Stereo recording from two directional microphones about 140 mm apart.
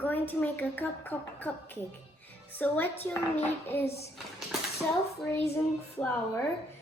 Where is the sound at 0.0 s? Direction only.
15° left (ahead or behind).